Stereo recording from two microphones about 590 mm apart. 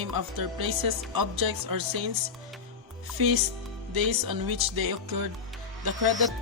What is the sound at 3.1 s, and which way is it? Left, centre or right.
Speech, right.